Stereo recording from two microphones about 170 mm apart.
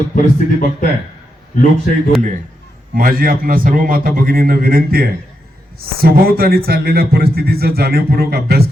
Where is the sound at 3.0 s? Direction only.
55° right (ahead or behind).